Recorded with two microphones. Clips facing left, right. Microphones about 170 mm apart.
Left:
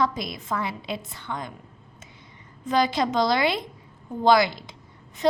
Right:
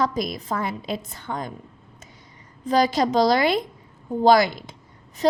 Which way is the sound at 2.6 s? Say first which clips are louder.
Right 3 dB; 40° right (ahead or behind).